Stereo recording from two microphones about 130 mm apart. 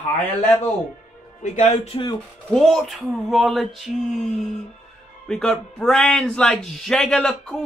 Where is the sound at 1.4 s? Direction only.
65° left (ahead or behind).